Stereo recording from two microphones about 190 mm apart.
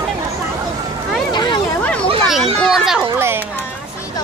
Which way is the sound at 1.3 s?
20° left (ahead or behind).